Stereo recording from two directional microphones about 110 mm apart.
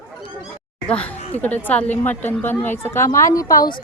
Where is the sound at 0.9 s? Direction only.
10° left (ahead or behind); by 3.7 s 30° left (ahead or behind).